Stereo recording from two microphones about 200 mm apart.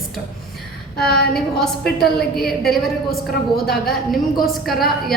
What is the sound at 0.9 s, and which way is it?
Speech, 50° left (ahead or behind).